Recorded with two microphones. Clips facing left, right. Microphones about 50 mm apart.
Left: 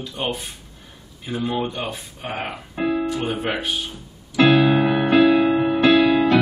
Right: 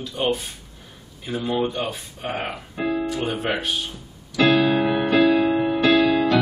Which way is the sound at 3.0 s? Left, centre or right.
Centre.